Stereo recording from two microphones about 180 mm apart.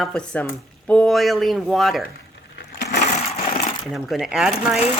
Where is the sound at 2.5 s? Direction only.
65° left (ahead or behind).